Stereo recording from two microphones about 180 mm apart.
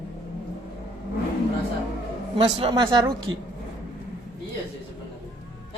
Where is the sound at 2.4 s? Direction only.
30° right (ahead or behind).